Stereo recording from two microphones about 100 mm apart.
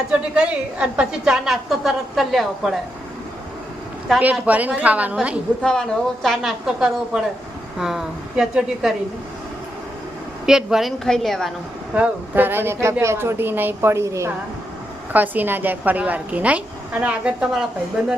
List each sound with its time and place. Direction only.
0.3 s a woman's voice: 10° right (ahead or behind)
4.2 s a woman's voice: 15° right (ahead or behind)
5.6 s a woman's voice: 5° left (ahead or behind)
10.4 s a woman's voice: 5° right (ahead or behind)
11.9 s speech: 15° right (ahead or behind)
15.1 s a woman's voice: 15° right (ahead or behind)